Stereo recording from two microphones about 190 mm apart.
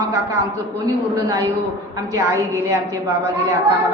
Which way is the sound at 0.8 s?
15° right (ahead or behind).